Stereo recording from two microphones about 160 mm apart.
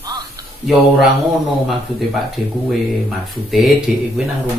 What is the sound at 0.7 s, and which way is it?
Speech, centre (ahead or behind).